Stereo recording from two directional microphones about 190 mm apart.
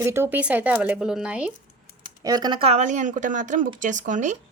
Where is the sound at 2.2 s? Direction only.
20° right (ahead or behind); by 4.3 s 40° right (ahead or behind).